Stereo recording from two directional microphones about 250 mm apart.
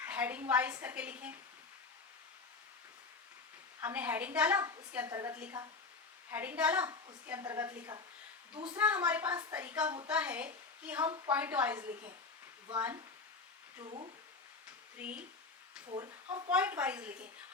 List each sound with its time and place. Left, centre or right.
0.0 s a woman's voice: centre
3.8 s a woman's voice: centre
13.8 s speech: right
16.3 s a woman's voice: centre